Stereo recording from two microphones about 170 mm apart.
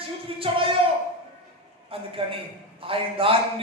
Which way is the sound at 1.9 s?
35° right (ahead or behind).